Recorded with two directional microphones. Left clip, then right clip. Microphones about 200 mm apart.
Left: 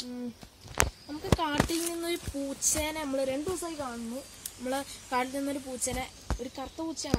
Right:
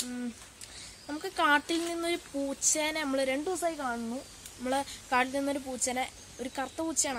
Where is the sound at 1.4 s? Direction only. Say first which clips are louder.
Right 8 dB; 10° right (ahead or behind).